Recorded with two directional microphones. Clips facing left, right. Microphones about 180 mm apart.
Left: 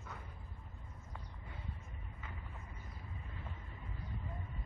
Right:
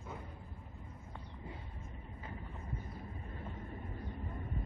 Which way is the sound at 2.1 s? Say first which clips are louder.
Right 5 dB; 35° right (ahead or behind).